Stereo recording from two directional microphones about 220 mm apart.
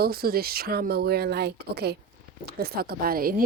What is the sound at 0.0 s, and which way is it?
Speech, 45° right (ahead or behind).